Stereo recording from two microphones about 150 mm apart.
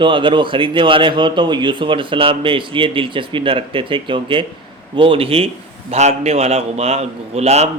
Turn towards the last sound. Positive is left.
turn(degrees=-45)  # may be behind; listen again after turning